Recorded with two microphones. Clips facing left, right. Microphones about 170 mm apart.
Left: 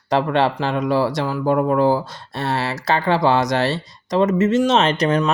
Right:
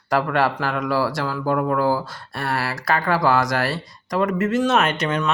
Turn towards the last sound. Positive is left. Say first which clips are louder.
# left 4 dB
turn(degrees=35)  # may be behind; listen again after turning